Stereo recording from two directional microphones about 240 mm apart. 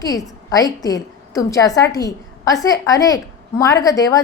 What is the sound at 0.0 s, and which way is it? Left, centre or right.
A woman's voice, centre.